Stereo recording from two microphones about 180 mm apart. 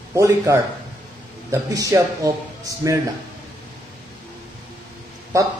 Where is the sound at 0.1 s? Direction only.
15° right (ahead or behind).